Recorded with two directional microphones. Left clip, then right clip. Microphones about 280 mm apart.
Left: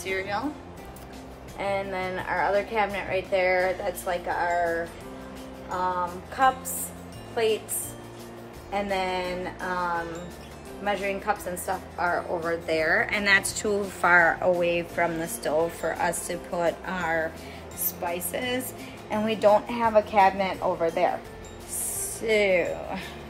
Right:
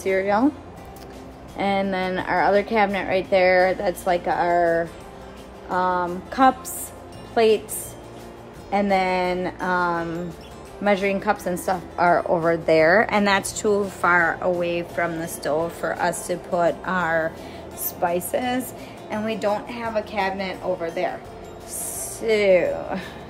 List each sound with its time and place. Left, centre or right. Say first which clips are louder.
1.6 s a woman's voice: right 6 dB; right
5.9 s a woman's voice: right 5 dB; right
8.7 s a woman's voice: right 7 dB; right; by 13.7 s centre
14.0 s a woman's voice: even; centre
19.0 s a woman's voice: left 3 dB; centre
22.2 s a woman's voice: right 5 dB; centre